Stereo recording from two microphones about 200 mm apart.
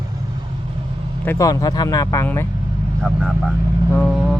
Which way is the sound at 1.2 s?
15° left (ahead or behind).